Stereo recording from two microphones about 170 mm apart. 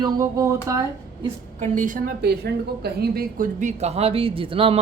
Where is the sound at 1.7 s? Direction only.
50° right (ahead or behind); by 4.8 s 30° right (ahead or behind).